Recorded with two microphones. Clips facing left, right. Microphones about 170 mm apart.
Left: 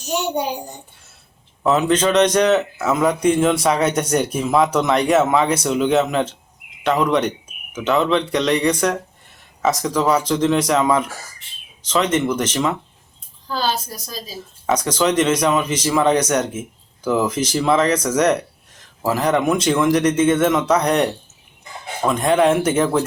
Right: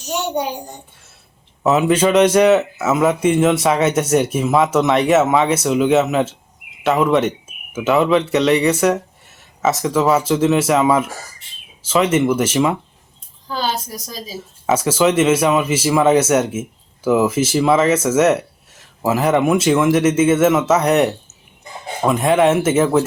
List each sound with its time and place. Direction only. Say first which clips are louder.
1.6 s speech: right 2 dB; 5° right (ahead or behind)
14.7 s speech: right 3 dB; 5° right (ahead or behind)